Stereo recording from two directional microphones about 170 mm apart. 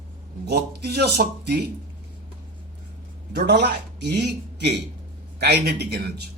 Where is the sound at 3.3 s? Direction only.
75° right (ahead or behind).